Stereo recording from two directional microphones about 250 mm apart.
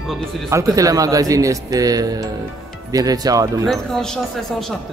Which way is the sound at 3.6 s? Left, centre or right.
Centre.